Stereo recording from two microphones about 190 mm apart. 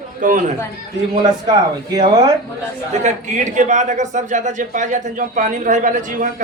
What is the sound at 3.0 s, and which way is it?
Speech, 40° right (ahead or behind).